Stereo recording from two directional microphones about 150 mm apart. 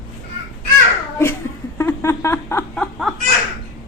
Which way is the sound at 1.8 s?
15° left (ahead or behind).